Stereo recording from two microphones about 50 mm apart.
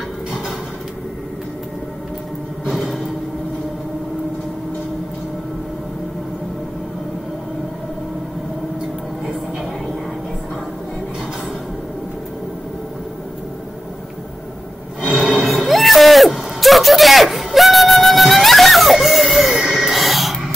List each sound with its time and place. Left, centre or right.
2.6 s music: centre
15.0 s a sound: centre
15.3 s music: centre